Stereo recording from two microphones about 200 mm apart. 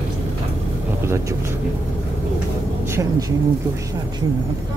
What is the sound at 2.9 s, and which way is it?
Speech, 15° right (ahead or behind).